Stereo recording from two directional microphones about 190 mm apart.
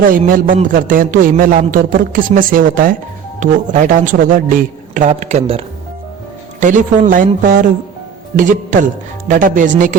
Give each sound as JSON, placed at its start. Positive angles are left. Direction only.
{"t": 0.1, "sound": "a man's voice", "side_deg": -45}